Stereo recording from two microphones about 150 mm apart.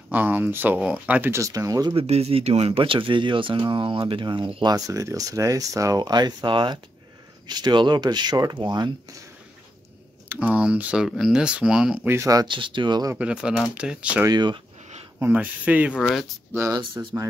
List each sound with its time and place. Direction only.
0.1 s speech: 10° right (ahead or behind)
2.0 s speech: 40° right (ahead or behind); by 9.2 s 25° right (ahead or behind)
10.2 s speech: 10° right (ahead or behind); by 13.1 s 30° right (ahead or behind)
13.1 s speech: 5° right (ahead or behind)
14.2 s speech: 30° right (ahead or behind)
15.1 s speech: 10° right (ahead or behind)
15.9 s speech: 5° left (ahead or behind)
17.0 s speech: 25° right (ahead or behind)